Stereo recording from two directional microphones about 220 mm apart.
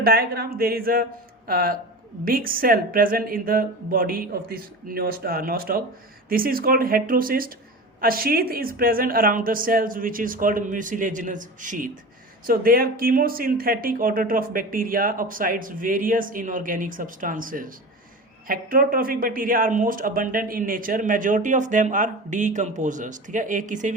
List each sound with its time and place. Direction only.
0.0 s speech: 45° right (ahead or behind)